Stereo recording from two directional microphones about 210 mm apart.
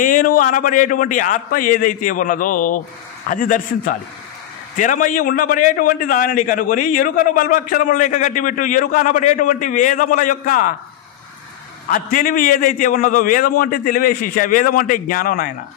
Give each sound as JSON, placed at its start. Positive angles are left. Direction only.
{"t": 0.0, "sound": "a man's voice", "side_deg": 40}
{"t": 11.9, "sound": "a man's voice", "side_deg": 40}